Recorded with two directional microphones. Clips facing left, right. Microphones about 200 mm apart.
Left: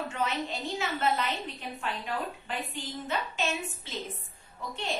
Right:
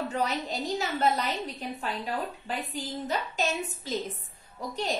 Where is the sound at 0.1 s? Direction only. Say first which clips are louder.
Right 2 dB; 40° right (ahead or behind).